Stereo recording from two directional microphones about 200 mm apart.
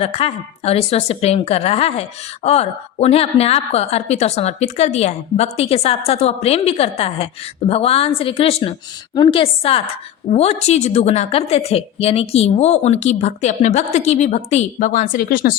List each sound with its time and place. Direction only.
0.0 s a woman's voice: 30° left (ahead or behind); by 15.5 s 45° left (ahead or behind)